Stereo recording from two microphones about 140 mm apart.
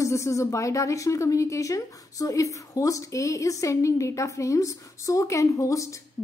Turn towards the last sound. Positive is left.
turn(degrees=20)  # may be behind; listen again after turning